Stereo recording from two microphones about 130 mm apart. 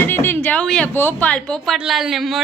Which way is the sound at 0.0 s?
15° left (ahead or behind).